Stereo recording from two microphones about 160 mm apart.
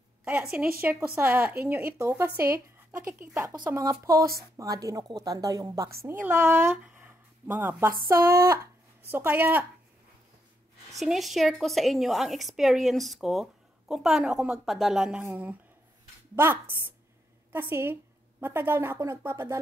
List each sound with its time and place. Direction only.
0.2 s speech: 5° right (ahead or behind)
4.1 s speech: 65° right (ahead or behind)
4.4 s speech: 20° right (ahead or behind)
8.2 s speech: 75° right (ahead or behind)
9.1 s speech: 10° right (ahead or behind)
11.0 s a woman's voice: centre (ahead or behind); by 19.6 s 15° right (ahead or behind)